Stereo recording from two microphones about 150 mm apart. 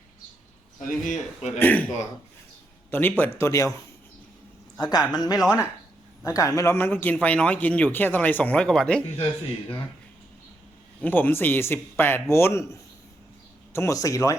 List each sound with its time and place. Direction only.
1.0 s speech: 50° left (ahead or behind)
1.5 s a man's voice: 10° left (ahead or behind)
2.9 s a man's voice: 15° left (ahead or behind)
4.8 s speech: 30° left (ahead or behind)
5.4 s speech: 5° right (ahead or behind)
6.2 s a man's voice: 20° left (ahead or behind); by 9.0 s 5° left (ahead or behind)
11.0 s a man's voice: 10° left (ahead or behind)